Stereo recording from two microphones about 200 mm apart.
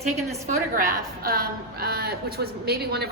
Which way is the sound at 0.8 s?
45° right (ahead or behind).